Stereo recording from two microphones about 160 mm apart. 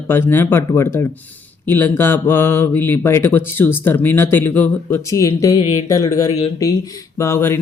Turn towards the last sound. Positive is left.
turn(degrees=15)  # may be behind; listen again after turning